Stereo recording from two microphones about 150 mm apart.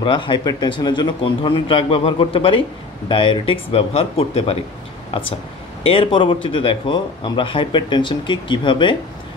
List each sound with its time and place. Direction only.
0.0 s speech: 30° left (ahead or behind)
5.9 s speech: 35° left (ahead or behind)